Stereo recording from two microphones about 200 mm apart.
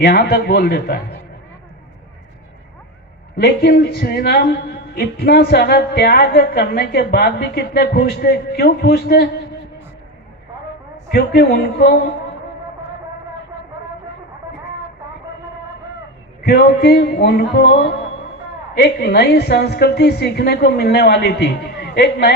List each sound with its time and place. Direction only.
0.0 s a man's voice: 55° left (ahead or behind)
3.3 s a man's voice: 55° left (ahead or behind)
11.1 s a man's voice: 55° left (ahead or behind)
16.4 s a woman's voice: 55° left (ahead or behind)
18.8 s a woman's voice: 55° left (ahead or behind)